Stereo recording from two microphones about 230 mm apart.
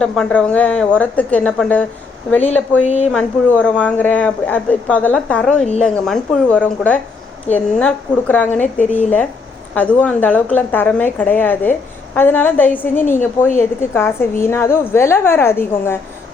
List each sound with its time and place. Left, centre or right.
0.0 s speech: centre
2.8 s speech: left
3.1 s a woman's voice: centre